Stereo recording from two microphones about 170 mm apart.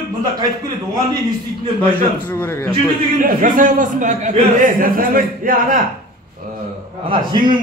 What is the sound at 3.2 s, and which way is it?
A man's voice, 55° right (ahead or behind).